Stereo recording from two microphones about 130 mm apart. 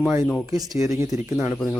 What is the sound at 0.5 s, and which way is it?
Speech, 25° right (ahead or behind).